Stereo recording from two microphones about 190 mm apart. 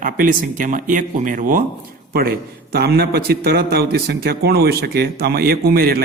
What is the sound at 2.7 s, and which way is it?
A man's voice, 55° right (ahead or behind).